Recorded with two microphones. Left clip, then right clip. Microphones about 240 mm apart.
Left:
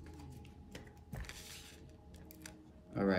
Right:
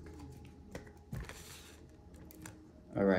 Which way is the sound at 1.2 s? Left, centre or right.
Centre.